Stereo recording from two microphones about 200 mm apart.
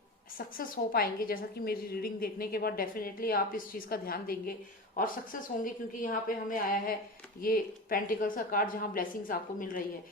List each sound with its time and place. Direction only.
0.3 s a woman's voice: 45° left (ahead or behind)